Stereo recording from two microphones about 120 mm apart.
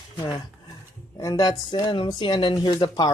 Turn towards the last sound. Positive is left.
turn(degrees=35)  # may be behind; listen again after turning